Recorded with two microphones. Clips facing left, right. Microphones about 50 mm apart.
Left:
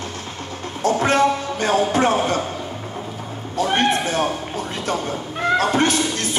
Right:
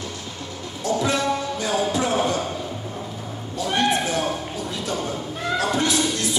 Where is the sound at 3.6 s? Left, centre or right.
Left.